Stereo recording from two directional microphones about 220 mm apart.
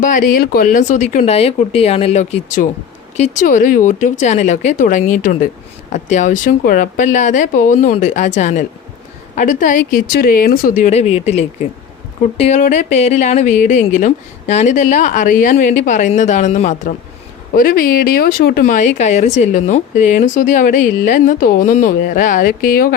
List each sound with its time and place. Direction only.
0.0 s speech: 40° left (ahead or behind)